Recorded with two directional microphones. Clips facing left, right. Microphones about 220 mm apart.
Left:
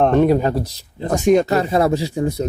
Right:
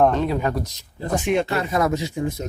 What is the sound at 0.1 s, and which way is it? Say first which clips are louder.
Speech: left 9 dB; 55° left (ahead or behind).